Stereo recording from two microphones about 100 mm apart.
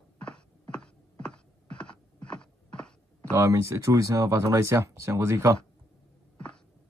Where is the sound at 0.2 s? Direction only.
10° left (ahead or behind).